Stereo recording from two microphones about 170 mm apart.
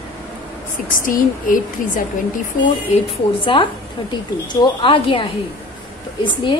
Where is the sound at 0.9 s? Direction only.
55° left (ahead or behind).